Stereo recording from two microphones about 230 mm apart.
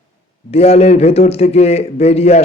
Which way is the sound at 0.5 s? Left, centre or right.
Left.